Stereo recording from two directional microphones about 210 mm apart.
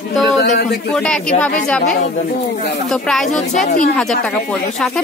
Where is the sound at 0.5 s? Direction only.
45° left (ahead or behind).